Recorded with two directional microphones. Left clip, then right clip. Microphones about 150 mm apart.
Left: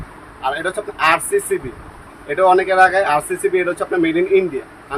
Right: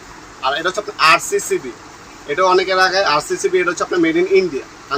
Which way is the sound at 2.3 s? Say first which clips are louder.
Left 2 dB; 20° left (ahead or behind).